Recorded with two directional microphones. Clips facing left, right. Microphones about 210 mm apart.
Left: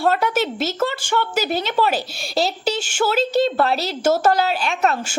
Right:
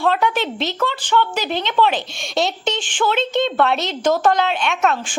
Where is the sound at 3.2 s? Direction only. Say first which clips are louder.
Left 5 dB; 40° left (ahead or behind).